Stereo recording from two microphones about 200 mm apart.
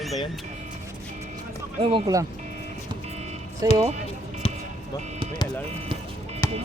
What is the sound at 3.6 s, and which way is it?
Speech, 15° right (ahead or behind).